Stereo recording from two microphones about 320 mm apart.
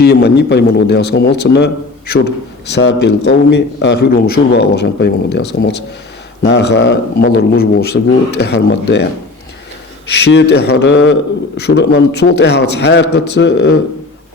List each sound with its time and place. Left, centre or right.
0.0 s a man's voice: left
10.2 s a man's voice: left